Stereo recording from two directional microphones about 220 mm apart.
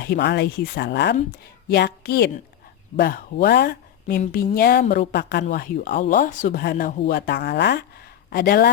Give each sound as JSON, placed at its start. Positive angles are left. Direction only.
{"t": 0.0, "sound": "speech", "side_deg": 50}